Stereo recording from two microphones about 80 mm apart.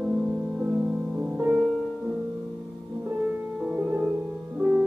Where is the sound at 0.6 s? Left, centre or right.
Centre.